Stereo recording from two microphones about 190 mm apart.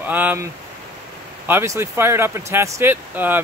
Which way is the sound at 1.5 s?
15° right (ahead or behind).